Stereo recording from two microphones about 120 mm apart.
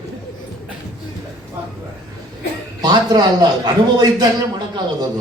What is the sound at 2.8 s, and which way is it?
A man's voice, 35° right (ahead or behind).